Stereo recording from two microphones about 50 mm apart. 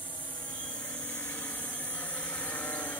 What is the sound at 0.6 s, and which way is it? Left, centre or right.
Vehicle, left.